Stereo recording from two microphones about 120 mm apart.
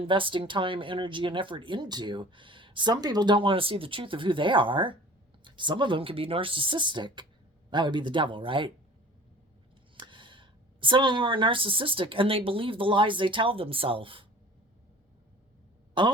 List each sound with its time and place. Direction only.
0.0 s speech: 45° right (ahead or behind)
10.1 s a woman's voice: 45° right (ahead or behind)
16.0 s speech: 40° right (ahead or behind)